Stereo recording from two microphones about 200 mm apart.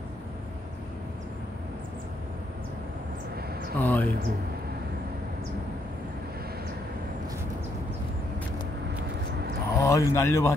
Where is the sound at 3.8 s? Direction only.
10° left (ahead or behind).